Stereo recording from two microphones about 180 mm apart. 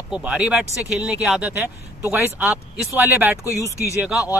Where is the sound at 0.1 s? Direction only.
5° right (ahead or behind).